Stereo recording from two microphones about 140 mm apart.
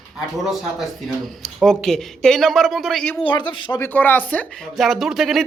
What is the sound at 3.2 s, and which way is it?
Speech, 35° left (ahead or behind).